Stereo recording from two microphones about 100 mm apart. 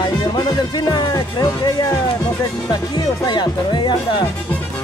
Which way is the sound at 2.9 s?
45° left (ahead or behind).